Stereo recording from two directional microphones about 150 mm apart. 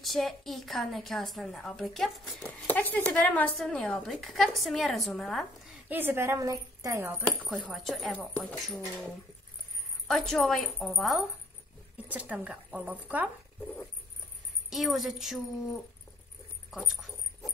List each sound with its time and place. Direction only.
0.0 s a woman's voice: centre (ahead or behind)
5.9 s speech: 15° right (ahead or behind)
7.4 s a woman's voice: 5° left (ahead or behind)
10.0 s a woman's voice: 5° left (ahead or behind)
14.7 s a woman's voice: centre (ahead or behind)
16.7 s dog: centre (ahead or behind)